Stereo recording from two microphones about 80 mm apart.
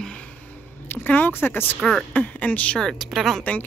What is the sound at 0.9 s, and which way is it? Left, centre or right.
Speech, left.